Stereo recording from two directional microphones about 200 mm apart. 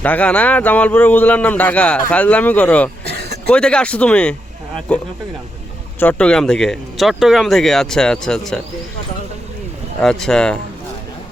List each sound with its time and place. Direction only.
0.0 s a man's voice: 10° left (ahead or behind)
3.1 s a sound: 55° right (ahead or behind)
3.4 s a man's voice: 5° left (ahead or behind)
10.0 s speech: 5° left (ahead or behind)